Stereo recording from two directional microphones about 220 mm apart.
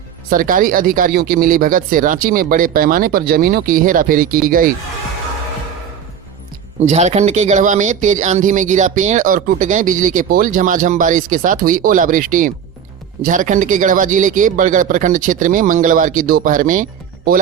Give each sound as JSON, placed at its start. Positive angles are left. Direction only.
{"t": 0.3, "sound": "speech", "side_deg": -40}
{"t": 6.8, "sound": "speech", "side_deg": -30}